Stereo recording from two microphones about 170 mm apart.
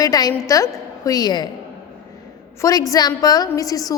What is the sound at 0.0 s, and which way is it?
A woman's voice, 20° left (ahead or behind).